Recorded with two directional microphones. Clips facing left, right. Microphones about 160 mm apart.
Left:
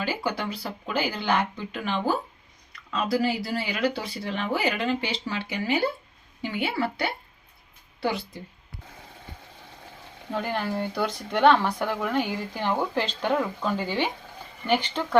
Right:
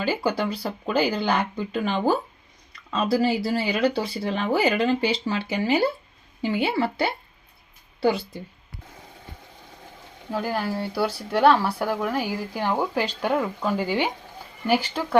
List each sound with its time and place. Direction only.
0.0 s speech: 35° right (ahead or behind)
10.3 s speech: 5° right (ahead or behind)